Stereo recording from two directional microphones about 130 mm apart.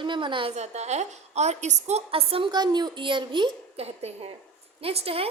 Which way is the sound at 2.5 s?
35° right (ahead or behind).